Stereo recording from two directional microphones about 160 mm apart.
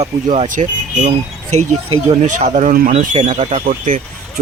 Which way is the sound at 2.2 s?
45° right (ahead or behind).